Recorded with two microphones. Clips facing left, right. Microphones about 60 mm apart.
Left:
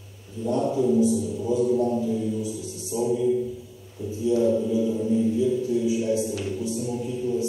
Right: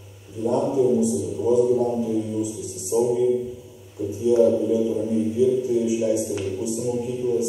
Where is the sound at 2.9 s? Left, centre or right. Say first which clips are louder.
Right 6 dB; centre.